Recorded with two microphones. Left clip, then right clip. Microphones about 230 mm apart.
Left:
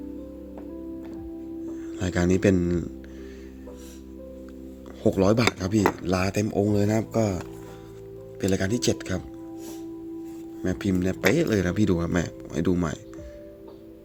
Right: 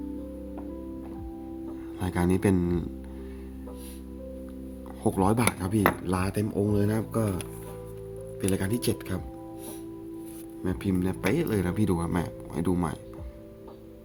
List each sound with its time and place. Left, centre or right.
1.8 s speech: centre
5.0 s speech: centre
8.4 s speech: centre
10.6 s speech: centre